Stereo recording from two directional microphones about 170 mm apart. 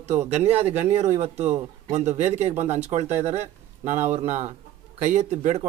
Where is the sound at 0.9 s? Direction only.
40° right (ahead or behind).